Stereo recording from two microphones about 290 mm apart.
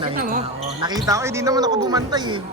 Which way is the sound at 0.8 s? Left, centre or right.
Centre.